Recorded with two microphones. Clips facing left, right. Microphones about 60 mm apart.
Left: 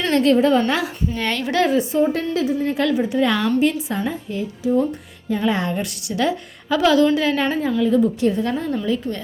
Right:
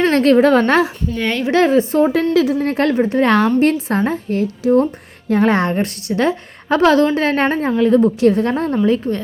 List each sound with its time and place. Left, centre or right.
0.0 s a woman's voice: right
1.3 s a woman's voice: right
1.9 s a woman's voice: right
2.6 s a woman's voice: right
5.7 s a woman's voice: right
8.5 s a woman's voice: right